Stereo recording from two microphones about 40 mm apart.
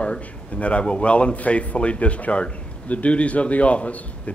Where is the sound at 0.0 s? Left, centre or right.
Left.